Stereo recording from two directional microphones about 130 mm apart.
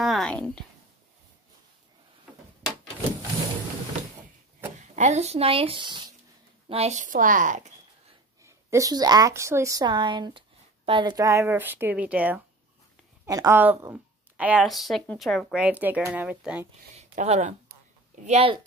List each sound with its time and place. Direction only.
0.0 s a sound: centre (ahead or behind)
2.6 s a sound: 5° right (ahead or behind)
4.7 s speech: 65° right (ahead or behind); by 6.1 s 35° right (ahead or behind)
6.7 s a woman's voice: 60° right (ahead or behind); by 7.6 s 85° right
8.4 s a woman's voice: 25° right (ahead or behind)
13.3 s speech: 25° right (ahead or behind)
13.6 s speech: 15° right (ahead or behind)
14.6 s a woman's voice: centre (ahead or behind)
16.9 s speech: 65° right (ahead or behind)